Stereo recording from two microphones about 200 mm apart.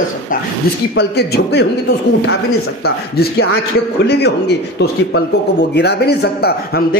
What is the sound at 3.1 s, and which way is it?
A man's voice, 50° left (ahead or behind).